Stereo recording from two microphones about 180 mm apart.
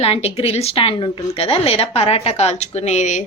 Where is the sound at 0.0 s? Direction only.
35° left (ahead or behind).